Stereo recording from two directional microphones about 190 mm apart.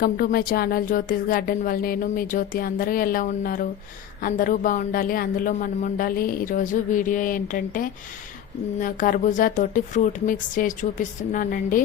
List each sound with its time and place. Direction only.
0.0 s speech: 50° left (ahead or behind)